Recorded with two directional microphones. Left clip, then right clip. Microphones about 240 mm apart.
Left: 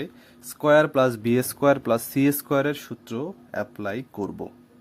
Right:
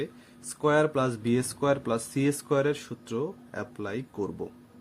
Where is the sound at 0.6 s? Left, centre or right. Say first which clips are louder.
Left 6 dB; left.